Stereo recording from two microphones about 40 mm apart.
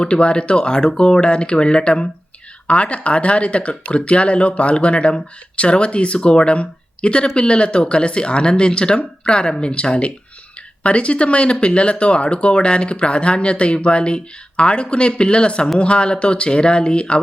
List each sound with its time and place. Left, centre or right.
0.0 s speech: left